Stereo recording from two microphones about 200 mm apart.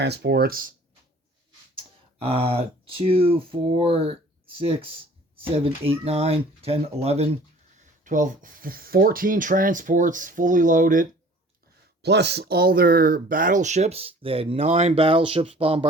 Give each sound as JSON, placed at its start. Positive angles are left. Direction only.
{"t": 0.0, "sound": "speech", "side_deg": -55}
{"t": 2.1, "sound": "speech", "side_deg": -30}
{"t": 12.0, "sound": "speech", "side_deg": -55}